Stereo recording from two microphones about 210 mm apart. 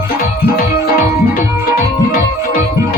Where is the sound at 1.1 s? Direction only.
40° left (ahead or behind).